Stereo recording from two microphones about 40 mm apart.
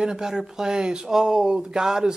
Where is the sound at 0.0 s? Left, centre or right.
Centre.